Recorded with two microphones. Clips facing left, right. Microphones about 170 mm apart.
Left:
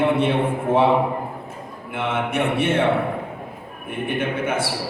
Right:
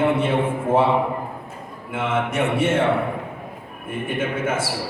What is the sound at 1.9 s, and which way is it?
Speech, 60° left (ahead or behind).